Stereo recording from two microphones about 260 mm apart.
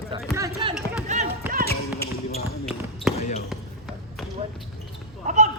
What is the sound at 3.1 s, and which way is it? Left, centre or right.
Basketball bounce, left.